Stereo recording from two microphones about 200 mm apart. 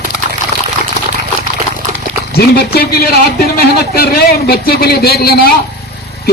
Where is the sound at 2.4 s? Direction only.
50° left (ahead or behind).